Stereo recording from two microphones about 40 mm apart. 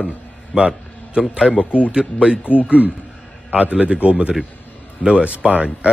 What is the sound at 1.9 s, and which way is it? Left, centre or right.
Speech, right.